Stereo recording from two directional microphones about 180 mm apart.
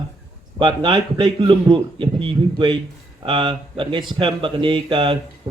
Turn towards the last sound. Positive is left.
turn(degrees=-25)  # may be behind; listen again after turning